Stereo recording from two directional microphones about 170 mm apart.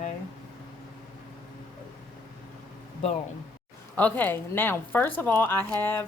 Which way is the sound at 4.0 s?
10° left (ahead or behind).